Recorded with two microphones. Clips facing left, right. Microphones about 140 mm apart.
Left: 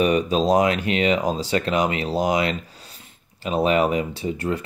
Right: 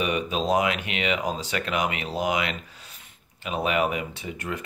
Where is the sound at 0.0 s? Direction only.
40° left (ahead or behind).